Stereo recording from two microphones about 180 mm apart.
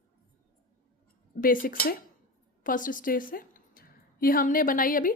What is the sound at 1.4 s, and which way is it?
A woman's voice, 50° left (ahead or behind).